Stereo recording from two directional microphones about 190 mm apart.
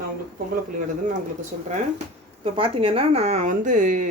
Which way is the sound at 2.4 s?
30° right (ahead or behind).